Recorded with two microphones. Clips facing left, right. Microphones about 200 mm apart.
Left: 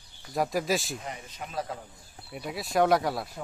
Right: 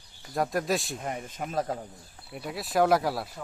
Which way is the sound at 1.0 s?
50° right (ahead or behind).